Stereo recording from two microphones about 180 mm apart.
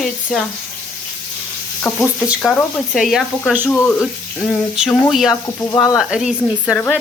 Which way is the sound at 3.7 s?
10° left (ahead or behind).